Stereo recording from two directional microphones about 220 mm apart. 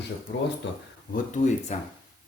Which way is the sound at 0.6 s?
55° left (ahead or behind).